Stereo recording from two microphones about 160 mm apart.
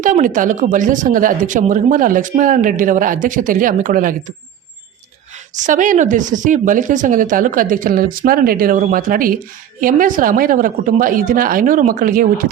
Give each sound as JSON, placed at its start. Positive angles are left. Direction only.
{"t": 0.0, "sound": "speech", "side_deg": -55}
{"t": 5.5, "sound": "speech", "side_deg": -55}